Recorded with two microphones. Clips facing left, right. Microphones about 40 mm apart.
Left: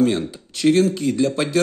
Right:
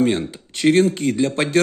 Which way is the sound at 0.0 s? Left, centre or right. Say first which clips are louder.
Even; right.